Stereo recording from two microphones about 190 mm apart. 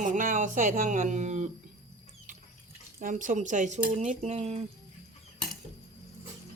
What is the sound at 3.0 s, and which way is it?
Speech, 45° right (ahead or behind).